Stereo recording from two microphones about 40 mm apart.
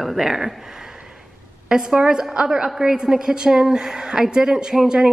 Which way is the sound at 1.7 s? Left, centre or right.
Centre.